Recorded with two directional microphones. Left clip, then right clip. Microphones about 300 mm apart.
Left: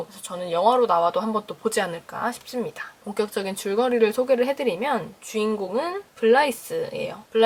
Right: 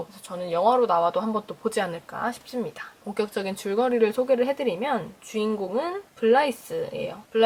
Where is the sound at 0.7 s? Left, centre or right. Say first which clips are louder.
Left 2 dB; centre.